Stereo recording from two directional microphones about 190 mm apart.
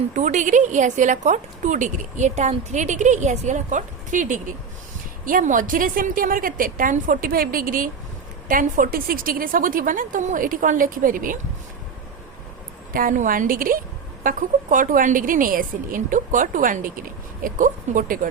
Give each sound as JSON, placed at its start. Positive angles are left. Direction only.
{"t": 0.1, "sound": "a woman's voice", "side_deg": -40}
{"t": 12.9, "sound": "a woman's voice", "side_deg": -45}